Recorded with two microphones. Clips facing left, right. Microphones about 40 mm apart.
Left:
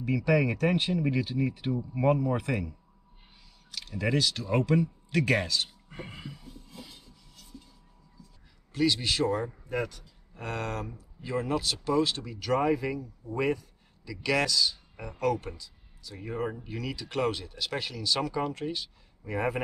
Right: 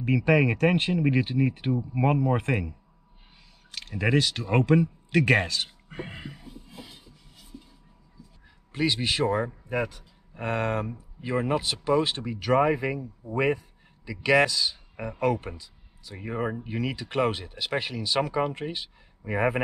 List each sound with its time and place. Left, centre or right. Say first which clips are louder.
0.0 s speech: right 4 dB; right
3.9 s speech: right 4 dB; right
4.6 s a sound: right 5 dB; right; by 8.3 s centre
8.7 s speech: right 1 dB; right